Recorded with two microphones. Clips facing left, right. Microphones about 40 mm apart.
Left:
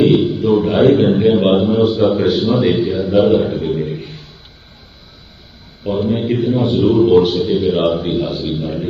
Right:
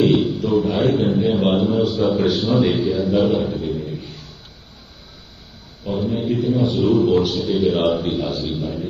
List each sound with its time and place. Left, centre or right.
0.0 s a sound: centre
0.3 s a sound: left
1.5 s a man's voice: left
2.1 s a man's voice: centre
3.2 s a sound: left
5.8 s a man's voice: left
7.5 s a man's voice: centre
8.4 s a man's voice: left
8.6 s music: left